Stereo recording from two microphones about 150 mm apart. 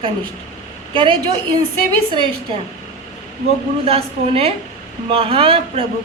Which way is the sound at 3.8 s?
40° right (ahead or behind).